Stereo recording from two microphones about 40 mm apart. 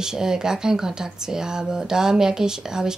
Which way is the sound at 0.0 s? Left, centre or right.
Centre.